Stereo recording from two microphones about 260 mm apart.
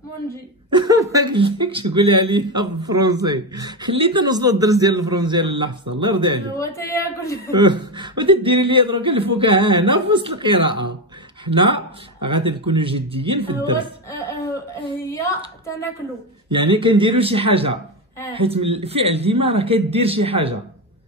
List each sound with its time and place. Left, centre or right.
0.7 s speech: centre
6.5 s a woman's voice: centre
7.5 s speech: centre
14.7 s a woman's voice: centre
16.4 s speech: centre